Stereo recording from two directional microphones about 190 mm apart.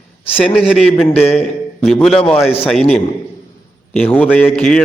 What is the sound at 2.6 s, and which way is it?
A man's voice, centre (ahead or behind).